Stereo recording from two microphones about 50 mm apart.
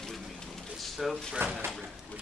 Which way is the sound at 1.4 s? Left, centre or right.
Right.